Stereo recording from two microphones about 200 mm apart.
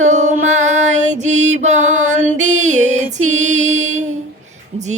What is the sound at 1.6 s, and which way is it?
Music, 35° right (ahead or behind).